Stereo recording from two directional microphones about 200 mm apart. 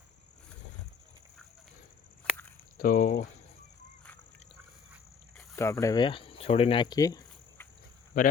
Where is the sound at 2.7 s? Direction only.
45° left (ahead or behind).